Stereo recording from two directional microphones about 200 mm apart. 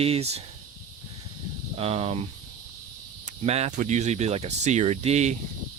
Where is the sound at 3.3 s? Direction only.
30° right (ahead or behind).